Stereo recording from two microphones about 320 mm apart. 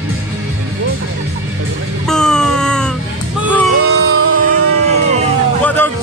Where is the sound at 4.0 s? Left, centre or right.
Right.